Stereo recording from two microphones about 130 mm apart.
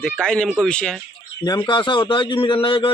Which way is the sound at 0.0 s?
5° left (ahead or behind).